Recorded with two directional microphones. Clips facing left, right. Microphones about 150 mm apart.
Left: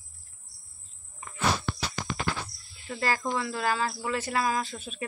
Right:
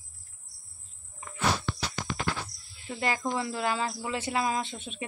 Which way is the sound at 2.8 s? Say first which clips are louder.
Left 1 dB; 20° right (ahead or behind).